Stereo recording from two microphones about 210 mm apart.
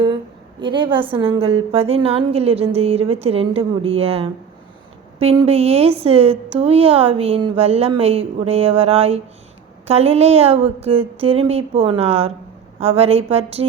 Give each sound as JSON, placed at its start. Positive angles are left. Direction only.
{"t": 0.6, "sound": "a woman's voice", "side_deg": -25}